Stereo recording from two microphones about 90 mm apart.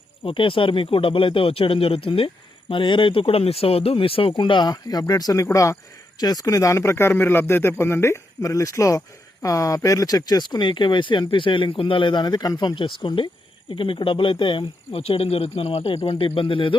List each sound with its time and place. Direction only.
0.3 s a man's voice: 75° left (ahead or behind)